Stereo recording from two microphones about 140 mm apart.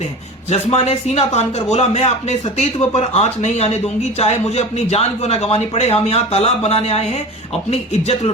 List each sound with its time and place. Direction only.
0.5 s a man's voice: 50° left (ahead or behind)